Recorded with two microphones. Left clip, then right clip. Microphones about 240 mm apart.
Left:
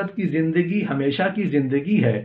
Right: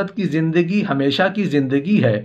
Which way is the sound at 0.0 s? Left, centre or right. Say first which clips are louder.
Right 2 dB; right.